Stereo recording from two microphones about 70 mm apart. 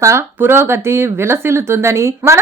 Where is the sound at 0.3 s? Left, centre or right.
Right.